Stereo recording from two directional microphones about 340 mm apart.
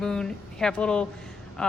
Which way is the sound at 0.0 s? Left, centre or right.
Centre.